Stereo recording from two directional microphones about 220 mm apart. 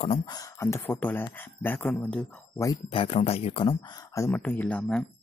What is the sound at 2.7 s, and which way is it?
Speech, 25° left (ahead or behind).